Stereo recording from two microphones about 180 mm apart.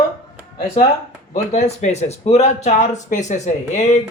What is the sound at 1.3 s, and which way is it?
Speech, 40° left (ahead or behind).